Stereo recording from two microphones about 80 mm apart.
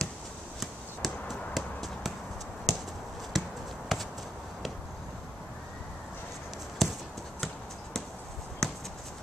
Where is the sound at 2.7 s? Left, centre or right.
Centre.